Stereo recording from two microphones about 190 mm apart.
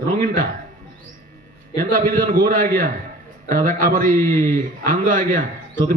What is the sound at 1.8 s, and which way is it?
A man's voice, 50° right (ahead or behind).